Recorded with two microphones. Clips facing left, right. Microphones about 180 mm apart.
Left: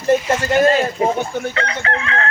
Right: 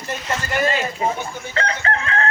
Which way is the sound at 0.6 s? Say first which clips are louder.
Left 5 dB; 55° left (ahead or behind).